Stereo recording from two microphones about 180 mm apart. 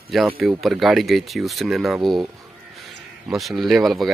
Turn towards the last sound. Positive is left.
turn(degrees=0)  # may be behind; listen again after turning